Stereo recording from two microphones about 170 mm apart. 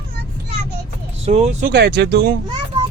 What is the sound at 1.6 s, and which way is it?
Speech, 80° right.